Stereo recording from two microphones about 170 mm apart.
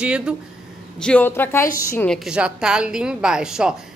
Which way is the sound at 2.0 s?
Centre (ahead or behind).